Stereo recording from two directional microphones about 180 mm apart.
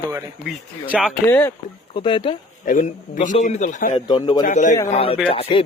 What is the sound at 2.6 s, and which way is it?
A man's voice, 45° left (ahead or behind).